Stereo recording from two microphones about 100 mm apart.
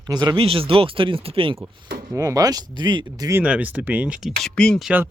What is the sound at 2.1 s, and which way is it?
Speech, 35° right (ahead or behind).